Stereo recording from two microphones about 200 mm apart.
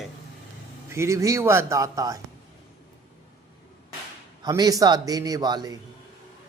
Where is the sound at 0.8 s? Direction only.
15° right (ahead or behind).